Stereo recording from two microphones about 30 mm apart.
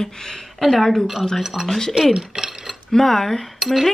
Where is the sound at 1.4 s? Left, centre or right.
Centre.